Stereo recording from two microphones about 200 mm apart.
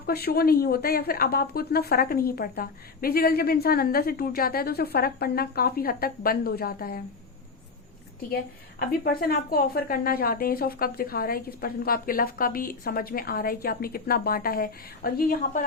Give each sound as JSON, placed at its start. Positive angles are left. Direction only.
{"t": 0.1, "sound": "speech", "side_deg": 50}
{"t": 8.9, "sound": "speech", "side_deg": 50}